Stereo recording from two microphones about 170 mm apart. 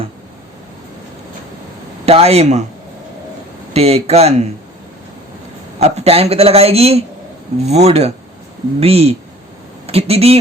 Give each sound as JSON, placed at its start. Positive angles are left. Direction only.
{"t": 2.0, "sound": "a man's voice", "side_deg": -40}
{"t": 3.7, "sound": "a man's voice", "side_deg": -35}
{"t": 5.8, "sound": "a man's voice", "side_deg": -35}